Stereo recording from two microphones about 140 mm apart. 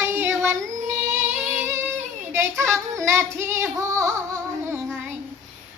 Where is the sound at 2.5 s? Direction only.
5° left (ahead or behind).